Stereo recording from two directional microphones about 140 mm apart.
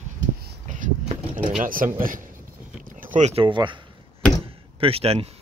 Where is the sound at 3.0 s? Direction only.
65° right (ahead or behind).